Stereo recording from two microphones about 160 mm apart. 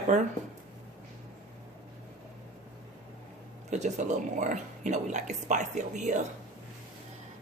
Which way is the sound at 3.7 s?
45° right (ahead or behind).